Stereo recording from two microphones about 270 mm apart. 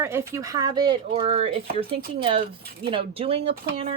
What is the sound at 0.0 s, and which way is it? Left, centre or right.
Speech, centre.